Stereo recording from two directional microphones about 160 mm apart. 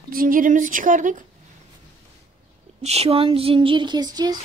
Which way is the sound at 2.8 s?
40° right (ahead or behind).